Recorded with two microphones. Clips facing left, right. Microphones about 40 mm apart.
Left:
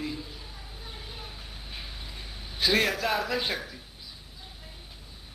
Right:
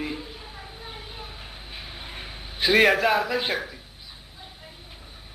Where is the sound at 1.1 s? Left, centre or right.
Centre.